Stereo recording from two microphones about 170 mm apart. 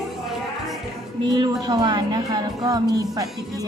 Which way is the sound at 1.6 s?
25° right (ahead or behind).